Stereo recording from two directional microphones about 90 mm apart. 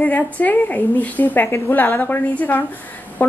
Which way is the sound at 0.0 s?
20° left (ahead or behind).